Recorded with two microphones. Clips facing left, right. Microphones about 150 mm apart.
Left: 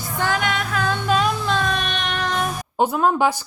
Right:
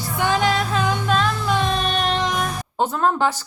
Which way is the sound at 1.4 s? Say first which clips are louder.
Right 2 dB; 20° right (ahead or behind).